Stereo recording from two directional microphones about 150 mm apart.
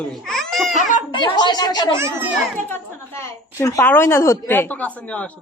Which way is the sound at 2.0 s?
15° right (ahead or behind).